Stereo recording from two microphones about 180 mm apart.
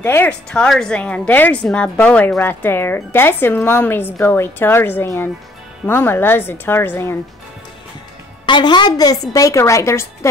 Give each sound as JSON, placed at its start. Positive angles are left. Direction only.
{"t": 0.0, "sound": "a woman's voice", "side_deg": 10}
{"t": 8.5, "sound": "a woman's voice", "side_deg": 25}